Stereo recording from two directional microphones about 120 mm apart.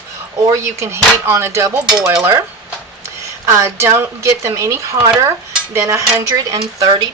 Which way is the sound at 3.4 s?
25° right (ahead or behind).